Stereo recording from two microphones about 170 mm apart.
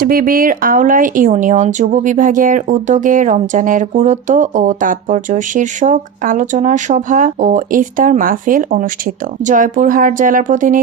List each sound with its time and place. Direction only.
0.0 s speech: 55° right (ahead or behind)